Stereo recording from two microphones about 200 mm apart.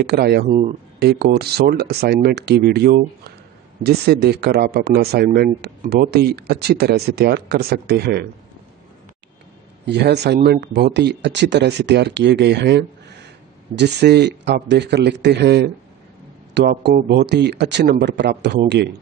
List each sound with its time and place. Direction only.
0.0 s speech: 50° right (ahead or behind)
0.5 s speech: 30° right (ahead or behind)
0.9 s speech: 55° right (ahead or behind)
9.8 s speech: 55° right (ahead or behind)